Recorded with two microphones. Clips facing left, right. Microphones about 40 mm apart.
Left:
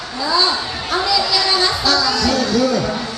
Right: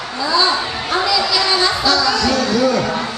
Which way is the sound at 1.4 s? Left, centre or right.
Centre.